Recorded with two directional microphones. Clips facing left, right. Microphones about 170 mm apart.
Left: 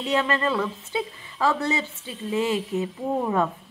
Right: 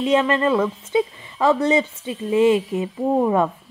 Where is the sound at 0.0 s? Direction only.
20° right (ahead or behind).